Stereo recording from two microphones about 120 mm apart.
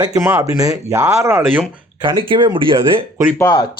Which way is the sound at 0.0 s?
25° right (ahead or behind).